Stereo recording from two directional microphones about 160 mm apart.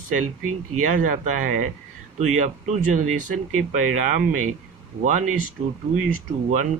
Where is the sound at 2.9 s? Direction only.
50° right (ahead or behind).